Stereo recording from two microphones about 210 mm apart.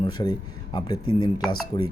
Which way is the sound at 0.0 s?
20° left (ahead or behind).